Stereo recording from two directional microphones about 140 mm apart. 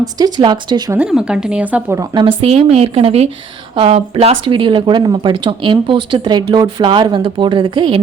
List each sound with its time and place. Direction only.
0.0 s speech: 30° right (ahead or behind)
0.9 s speech: 5° right (ahead or behind)
2.2 s a woman's voice: 45° right (ahead or behind)